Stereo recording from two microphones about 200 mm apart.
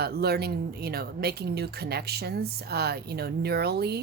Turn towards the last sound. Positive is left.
turn(degrees=-55)  # may be behind; listen again after turning